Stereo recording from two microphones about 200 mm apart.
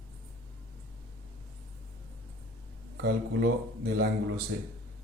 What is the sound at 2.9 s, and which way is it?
A man's voice, 55° right (ahead or behind).